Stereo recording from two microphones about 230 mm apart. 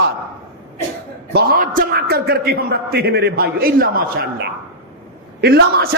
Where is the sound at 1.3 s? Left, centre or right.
Right.